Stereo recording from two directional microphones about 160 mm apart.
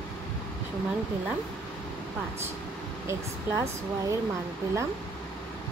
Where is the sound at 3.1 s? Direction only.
20° right (ahead or behind).